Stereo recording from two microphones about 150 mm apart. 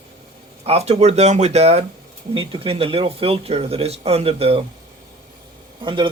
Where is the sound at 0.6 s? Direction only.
45° right (ahead or behind).